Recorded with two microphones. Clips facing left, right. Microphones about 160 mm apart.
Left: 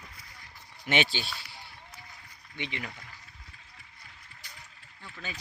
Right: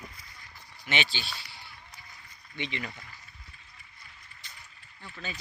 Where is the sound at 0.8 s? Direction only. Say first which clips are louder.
Left 4 dB; 50° left (ahead or behind).